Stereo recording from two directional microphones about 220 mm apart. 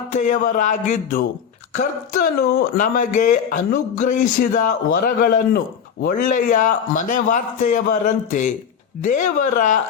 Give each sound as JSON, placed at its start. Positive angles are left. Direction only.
{"t": 0.1, "sound": "speech", "side_deg": 35}